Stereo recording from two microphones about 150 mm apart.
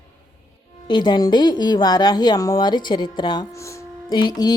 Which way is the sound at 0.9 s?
30° left (ahead or behind).